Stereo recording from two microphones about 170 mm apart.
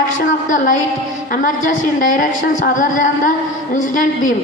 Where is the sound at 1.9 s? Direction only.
55° left (ahead or behind).